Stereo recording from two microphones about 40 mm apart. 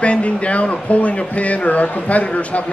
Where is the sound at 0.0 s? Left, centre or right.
Left.